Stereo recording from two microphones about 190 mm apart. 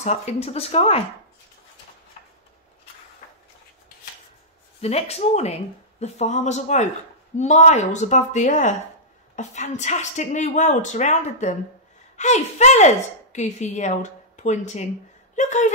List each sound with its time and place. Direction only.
0.0 s a woman's voice: 35° left (ahead or behind)
4.8 s a woman's voice: 35° left (ahead or behind)